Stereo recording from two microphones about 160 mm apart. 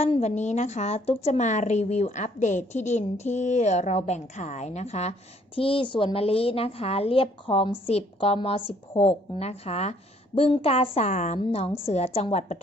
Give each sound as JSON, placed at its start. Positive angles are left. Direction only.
{"t": 0.0, "sound": "a woman's voice", "side_deg": 45}